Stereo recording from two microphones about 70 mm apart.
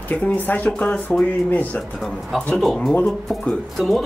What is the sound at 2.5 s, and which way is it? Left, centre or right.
Speech, centre.